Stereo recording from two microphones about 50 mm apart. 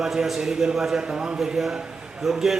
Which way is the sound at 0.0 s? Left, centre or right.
Centre.